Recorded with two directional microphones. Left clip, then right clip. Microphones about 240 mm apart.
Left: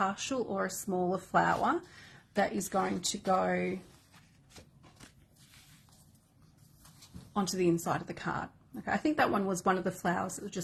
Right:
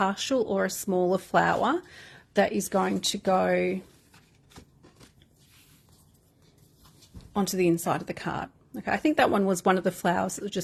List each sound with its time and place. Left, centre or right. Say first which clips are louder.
0.0 s speech: right 7 dB; right
7.3 s speech: right 5 dB; right